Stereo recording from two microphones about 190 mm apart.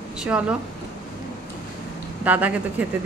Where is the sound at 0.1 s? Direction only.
5° right (ahead or behind).